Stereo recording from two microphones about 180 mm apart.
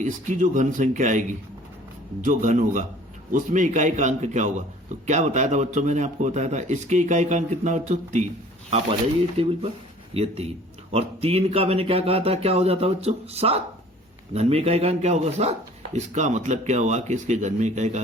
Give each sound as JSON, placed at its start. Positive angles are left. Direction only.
{"t": 0.0, "sound": "a man's voice", "side_deg": -45}
{"t": 9.4, "sound": "a man's voice", "side_deg": -35}